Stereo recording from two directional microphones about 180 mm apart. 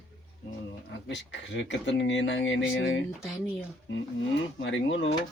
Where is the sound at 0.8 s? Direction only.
85° left.